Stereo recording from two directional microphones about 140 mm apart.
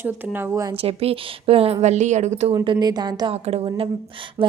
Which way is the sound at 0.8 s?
45° right (ahead or behind).